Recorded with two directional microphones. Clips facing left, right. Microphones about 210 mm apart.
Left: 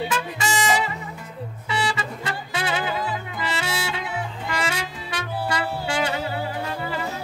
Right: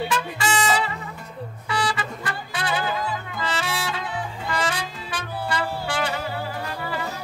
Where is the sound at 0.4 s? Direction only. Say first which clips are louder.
Even; 20° left (ahead or behind).